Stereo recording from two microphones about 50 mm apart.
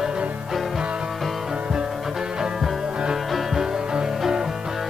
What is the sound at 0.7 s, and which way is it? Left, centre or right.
Music, centre.